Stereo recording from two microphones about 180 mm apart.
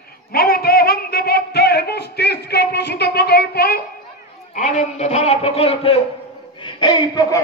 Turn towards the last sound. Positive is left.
turn(degrees=20)  # may be behind; listen again after turning